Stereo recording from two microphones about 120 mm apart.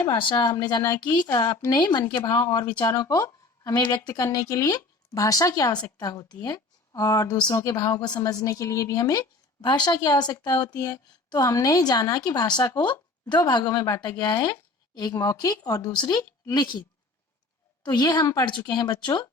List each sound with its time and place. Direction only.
0.1 s speech: 40° left (ahead or behind)
17.8 s speech: 35° left (ahead or behind)